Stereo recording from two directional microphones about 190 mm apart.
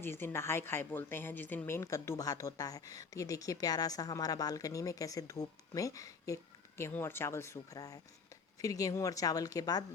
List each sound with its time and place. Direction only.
0.0 s a woman's voice: 10° left (ahead or behind)